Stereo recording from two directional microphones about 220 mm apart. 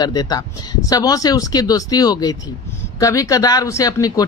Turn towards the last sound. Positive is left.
turn(degrees=15)  # may be behind; listen again after turning